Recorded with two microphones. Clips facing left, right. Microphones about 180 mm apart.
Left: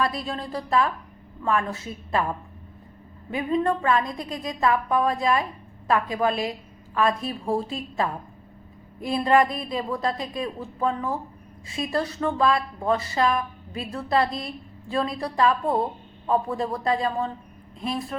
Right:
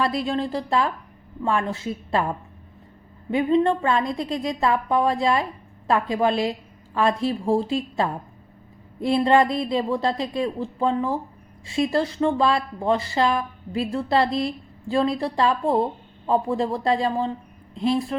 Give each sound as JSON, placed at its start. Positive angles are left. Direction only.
{"t": 0.0, "sound": "speech", "side_deg": -25}
{"t": 3.3, "sound": "speech", "side_deg": -25}